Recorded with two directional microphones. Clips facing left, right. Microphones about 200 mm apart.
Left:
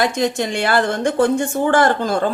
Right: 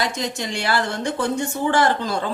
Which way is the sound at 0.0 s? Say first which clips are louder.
Left 7 dB; 55° left (ahead or behind).